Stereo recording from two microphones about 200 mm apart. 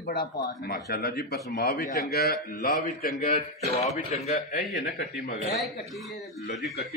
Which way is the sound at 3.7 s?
35° left (ahead or behind).